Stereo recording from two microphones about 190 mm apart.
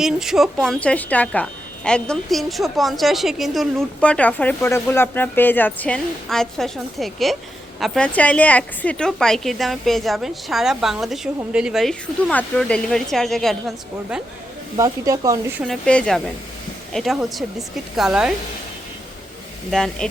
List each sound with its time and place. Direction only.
0.0 s a woman's voice: centre (ahead or behind)
14.8 s speech: 15° right (ahead or behind)
15.6 s a woman's voice: 5° left (ahead or behind)
19.7 s a woman's voice: 5° left (ahead or behind)